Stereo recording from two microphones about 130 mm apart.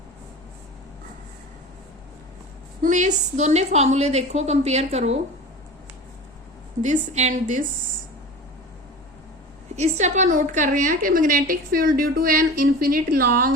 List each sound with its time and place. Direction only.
2.8 s a woman's voice: 70° right (ahead or behind); by 5.2 s 55° right (ahead or behind)
6.8 s a woman's voice: 65° right (ahead or behind)
9.7 s a woman's voice: 60° right (ahead or behind); by 13.5 s 90° right